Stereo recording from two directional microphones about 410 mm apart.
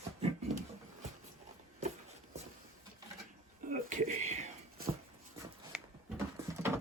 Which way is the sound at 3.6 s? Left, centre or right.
Centre.